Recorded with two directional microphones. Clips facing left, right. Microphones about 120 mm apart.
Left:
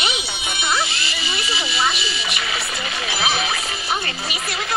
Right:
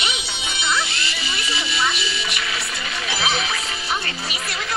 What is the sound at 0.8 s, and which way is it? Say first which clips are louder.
Speech: left 1 dB; 5° left (ahead or behind).